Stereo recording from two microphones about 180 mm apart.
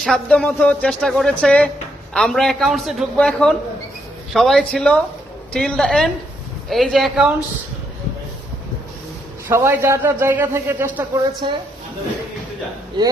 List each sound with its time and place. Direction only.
0.0 s speech: 5° left (ahead or behind)
9.5 s a man's voice: 15° right (ahead or behind)
11.4 s a woman's voice: 25° right (ahead or behind)